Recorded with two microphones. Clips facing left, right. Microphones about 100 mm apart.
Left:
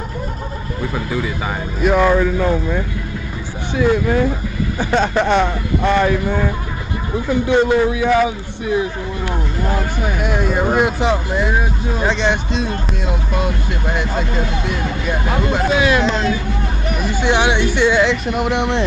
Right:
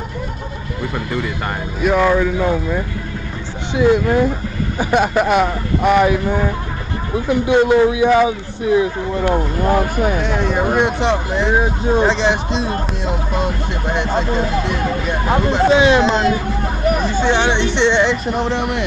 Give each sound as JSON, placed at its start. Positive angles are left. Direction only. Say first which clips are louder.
{"t": 1.8, "sound": "speech", "louder": "even", "side_deg": 0}
{"t": 2.3, "sound": "speech", "louder": "even", "side_deg": -10}
{"t": 3.7, "sound": "speech", "louder": "right 2 dB", "side_deg": -20}
{"t": 9.3, "sound": "speech", "louder": "right 6 dB", "side_deg": -50}
{"t": 10.2, "sound": "speech", "louder": "even", "side_deg": 5}
{"t": 11.5, "sound": "speech", "louder": "right 5 dB", "side_deg": -30}
{"t": 12.1, "sound": "speech", "louder": "right 1 dB", "side_deg": 0}
{"t": 14.1, "sound": "speech", "louder": "right 3 dB", "side_deg": -40}
{"t": 15.6, "sound": "speech", "louder": "right 4 dB", "side_deg": -30}
{"t": 17.1, "sound": "speech", "louder": "even", "side_deg": 15}
{"t": 18.4, "sound": "speech", "louder": "left 1 dB", "side_deg": 15}